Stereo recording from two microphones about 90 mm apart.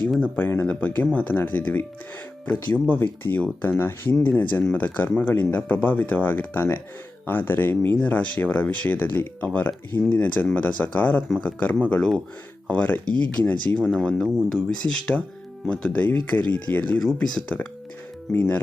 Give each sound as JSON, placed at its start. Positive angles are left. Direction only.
{"t": 0.2, "sound": "speech", "side_deg": 20}
{"t": 3.8, "sound": "speech", "side_deg": 20}